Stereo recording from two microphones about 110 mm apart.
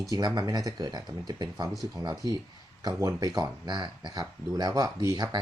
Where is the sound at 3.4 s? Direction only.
45° right (ahead or behind).